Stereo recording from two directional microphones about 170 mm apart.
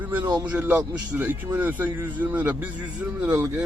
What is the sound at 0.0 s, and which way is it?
A man's voice, 10° right (ahead or behind).